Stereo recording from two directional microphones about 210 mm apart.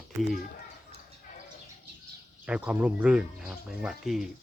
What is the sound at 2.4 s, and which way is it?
Speech, 5° right (ahead or behind).